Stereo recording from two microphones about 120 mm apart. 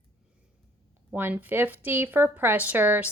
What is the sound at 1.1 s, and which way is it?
A woman's voice, 15° right (ahead or behind).